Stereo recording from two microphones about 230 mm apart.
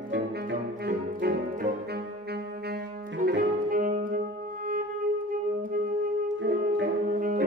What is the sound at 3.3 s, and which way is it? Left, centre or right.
Saxophone, right.